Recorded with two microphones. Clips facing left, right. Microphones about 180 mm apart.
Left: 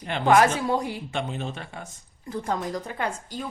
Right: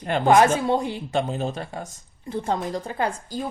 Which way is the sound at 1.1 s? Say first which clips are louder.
Right 9 dB; 40° right (ahead or behind).